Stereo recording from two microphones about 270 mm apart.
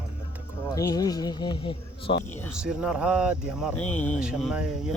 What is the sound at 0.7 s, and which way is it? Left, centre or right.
Speech, centre.